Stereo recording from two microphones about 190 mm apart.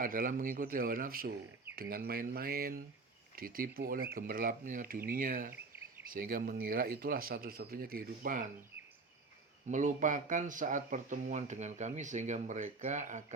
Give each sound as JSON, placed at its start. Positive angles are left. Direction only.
{"t": 0.0, "sound": "speech", "side_deg": -45}
{"t": 9.6, "sound": "speech", "side_deg": -40}